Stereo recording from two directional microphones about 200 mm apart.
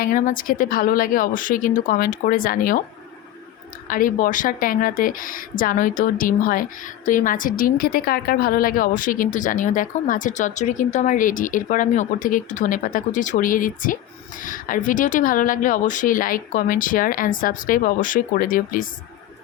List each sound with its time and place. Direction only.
0.0 s speech: 45° left (ahead or behind)
3.8 s speech: 45° left (ahead or behind)